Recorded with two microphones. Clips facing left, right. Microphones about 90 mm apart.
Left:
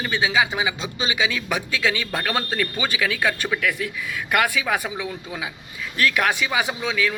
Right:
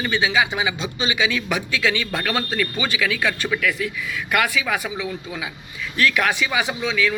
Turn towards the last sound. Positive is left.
turn(degrees=40)  # may be behind; listen again after turning